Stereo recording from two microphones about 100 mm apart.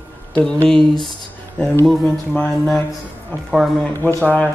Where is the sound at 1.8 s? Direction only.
5° left (ahead or behind).